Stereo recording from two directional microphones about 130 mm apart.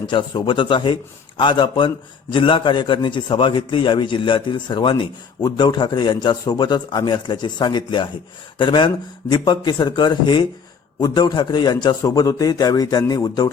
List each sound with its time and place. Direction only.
0.1 s a man's voice: 40° left (ahead or behind)